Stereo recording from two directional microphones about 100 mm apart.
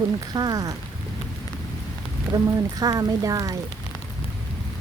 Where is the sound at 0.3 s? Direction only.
40° right (ahead or behind).